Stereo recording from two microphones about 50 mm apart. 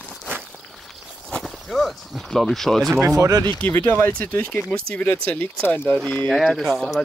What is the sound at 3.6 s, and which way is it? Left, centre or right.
Speech, left.